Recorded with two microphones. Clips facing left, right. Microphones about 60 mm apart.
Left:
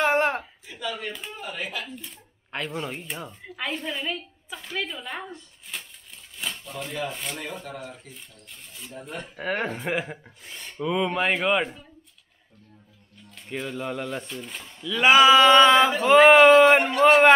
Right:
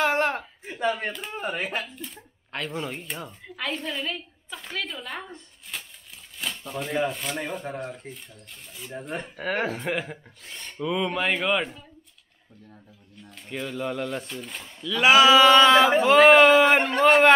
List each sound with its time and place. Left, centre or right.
0.0 s a sound: centre
0.7 s a sound: right
1.4 s speech: right
1.9 s speech: centre
6.3 s a sound: centre
7.1 s speech: centre
8.1 s speech: right
9.4 s speech: centre
13.5 s a man's voice: centre